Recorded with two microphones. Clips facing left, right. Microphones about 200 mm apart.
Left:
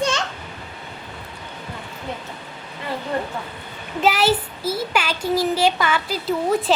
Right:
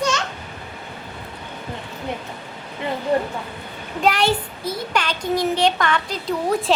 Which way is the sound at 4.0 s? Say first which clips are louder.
Left 1 dB; 5° left (ahead or behind).